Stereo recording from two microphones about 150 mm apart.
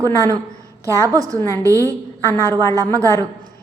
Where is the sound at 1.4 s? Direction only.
20° left (ahead or behind).